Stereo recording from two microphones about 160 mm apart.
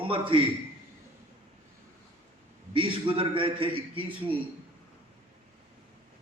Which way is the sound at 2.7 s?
35° right (ahead or behind).